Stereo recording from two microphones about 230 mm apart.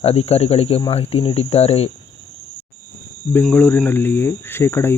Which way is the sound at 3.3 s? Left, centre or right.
Centre.